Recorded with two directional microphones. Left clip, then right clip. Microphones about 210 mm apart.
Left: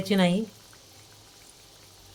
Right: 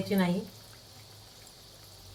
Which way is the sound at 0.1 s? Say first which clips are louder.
Left 7 dB; 55° left (ahead or behind).